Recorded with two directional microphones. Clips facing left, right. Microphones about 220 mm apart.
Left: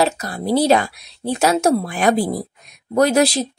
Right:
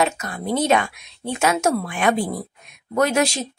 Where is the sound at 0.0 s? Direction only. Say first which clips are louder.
Left 3 dB; 35° left (ahead or behind).